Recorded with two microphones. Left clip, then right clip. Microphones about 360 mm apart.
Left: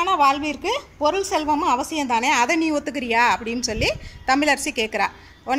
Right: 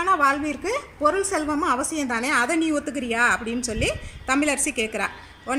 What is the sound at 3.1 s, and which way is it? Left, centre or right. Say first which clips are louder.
Speech: left 3 dB; left.